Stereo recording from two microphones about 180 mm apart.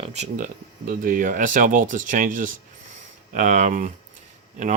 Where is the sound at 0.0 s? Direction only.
40° right (ahead or behind).